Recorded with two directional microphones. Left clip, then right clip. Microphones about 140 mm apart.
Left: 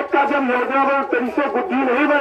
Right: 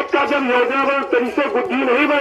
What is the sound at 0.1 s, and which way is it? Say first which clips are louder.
Speech: even; 30° left (ahead or behind).